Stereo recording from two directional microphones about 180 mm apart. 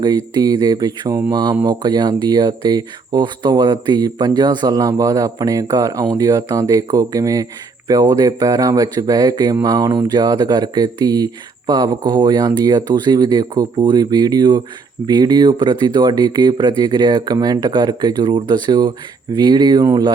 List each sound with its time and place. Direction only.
0.3 s speech: 25° right (ahead or behind)